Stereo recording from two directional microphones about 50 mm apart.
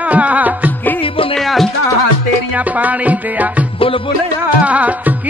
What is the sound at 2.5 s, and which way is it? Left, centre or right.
Music, right.